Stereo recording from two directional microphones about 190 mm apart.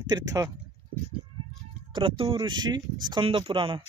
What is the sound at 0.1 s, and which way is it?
Speech, 20° right (ahead or behind).